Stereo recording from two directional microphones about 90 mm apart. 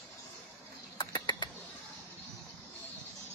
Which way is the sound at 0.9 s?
55° left (ahead or behind).